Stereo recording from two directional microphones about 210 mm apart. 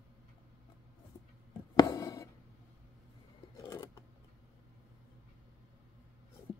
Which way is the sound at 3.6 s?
15° left (ahead or behind).